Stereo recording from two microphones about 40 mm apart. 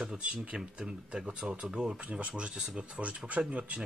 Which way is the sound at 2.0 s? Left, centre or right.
Right.